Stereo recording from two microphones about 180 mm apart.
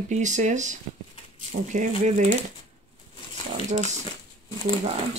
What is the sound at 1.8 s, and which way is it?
Speech, 45° right (ahead or behind).